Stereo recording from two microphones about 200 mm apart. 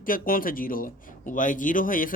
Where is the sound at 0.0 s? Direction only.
45° left (ahead or behind).